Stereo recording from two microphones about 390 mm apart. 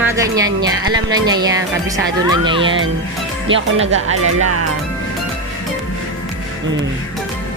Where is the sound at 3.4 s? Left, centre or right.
Right.